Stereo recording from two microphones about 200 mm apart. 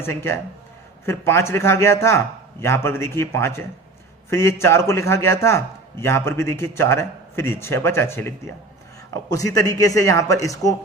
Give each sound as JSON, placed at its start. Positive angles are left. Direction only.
{"t": 0.0, "sound": "a man's voice", "side_deg": 10}
{"t": 9.3, "sound": "a man's voice", "side_deg": 15}